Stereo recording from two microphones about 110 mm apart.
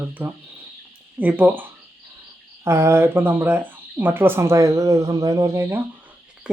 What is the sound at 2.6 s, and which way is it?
Speech, 25° right (ahead or behind).